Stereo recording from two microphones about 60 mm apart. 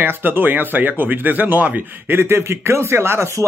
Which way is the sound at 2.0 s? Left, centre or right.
Right.